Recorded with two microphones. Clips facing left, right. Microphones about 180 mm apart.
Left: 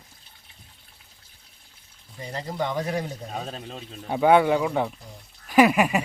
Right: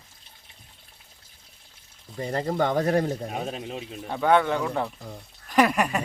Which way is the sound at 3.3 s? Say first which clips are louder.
Right 3 dB; 15° right (ahead or behind).